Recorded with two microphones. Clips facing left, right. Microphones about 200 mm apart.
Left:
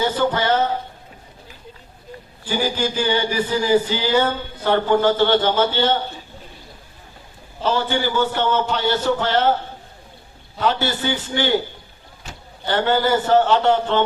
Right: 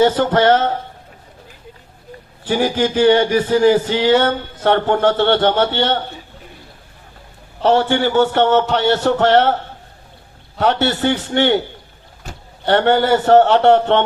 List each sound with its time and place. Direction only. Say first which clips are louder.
0.0 s speech: right 7 dB; 70° right (ahead or behind)
2.4 s speech: right 5 dB; 70° right (ahead or behind)
7.6 s speech: right 6 dB; 70° right (ahead or behind)
10.6 s a man's voice: right 5 dB; 70° right (ahead or behind)